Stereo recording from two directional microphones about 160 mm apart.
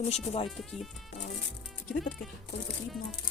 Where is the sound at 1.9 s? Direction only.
75° left (ahead or behind).